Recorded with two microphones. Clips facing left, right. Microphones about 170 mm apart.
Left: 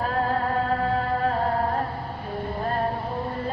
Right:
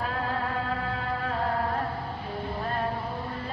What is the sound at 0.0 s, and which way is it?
Music, 40° left (ahead or behind).